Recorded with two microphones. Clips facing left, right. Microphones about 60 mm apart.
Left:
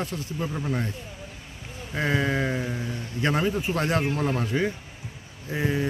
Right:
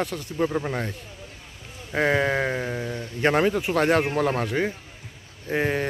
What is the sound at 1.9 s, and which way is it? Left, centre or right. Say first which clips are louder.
Speech: right 4 dB; right.